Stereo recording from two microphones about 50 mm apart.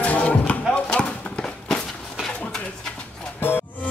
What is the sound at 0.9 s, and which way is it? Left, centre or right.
Horse, left.